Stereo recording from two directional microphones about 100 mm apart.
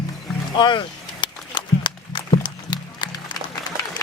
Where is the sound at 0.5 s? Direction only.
50° left (ahead or behind).